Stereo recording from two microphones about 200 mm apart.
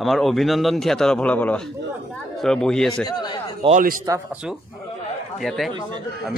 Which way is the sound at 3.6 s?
40° right (ahead or behind).